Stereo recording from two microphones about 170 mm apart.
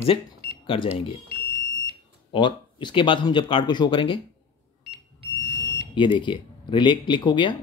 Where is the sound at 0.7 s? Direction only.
30° left (ahead or behind).